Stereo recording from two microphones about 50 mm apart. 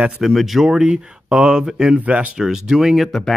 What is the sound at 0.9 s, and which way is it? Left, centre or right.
Speech, centre.